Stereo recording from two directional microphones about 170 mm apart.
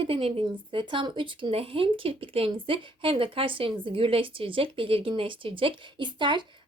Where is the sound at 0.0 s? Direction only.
35° right (ahead or behind).